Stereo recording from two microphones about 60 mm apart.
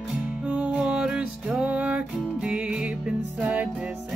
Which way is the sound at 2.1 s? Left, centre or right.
Centre.